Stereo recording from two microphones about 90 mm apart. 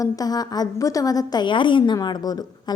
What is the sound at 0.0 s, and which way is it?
A woman's voice, 45° left (ahead or behind).